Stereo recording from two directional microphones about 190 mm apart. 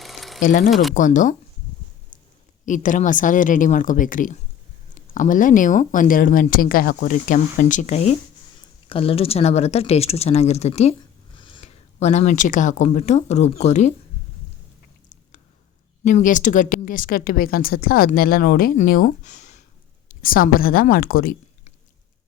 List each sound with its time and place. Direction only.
0.0 s a sound: centre (ahead or behind)
0.7 s speech: centre (ahead or behind)
0.9 s speech: 40° left (ahead or behind)
2.6 s speech: 40° left (ahead or behind)
16.0 s speech: 40° left (ahead or behind)